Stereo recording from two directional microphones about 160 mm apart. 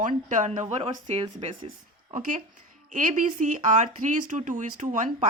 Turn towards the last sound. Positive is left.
turn(degrees=-50)  # may be behind; listen again after turning